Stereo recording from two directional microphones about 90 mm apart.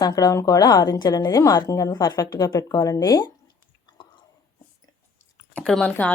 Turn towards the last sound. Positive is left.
turn(degrees=20)  # may be behind; listen again after turning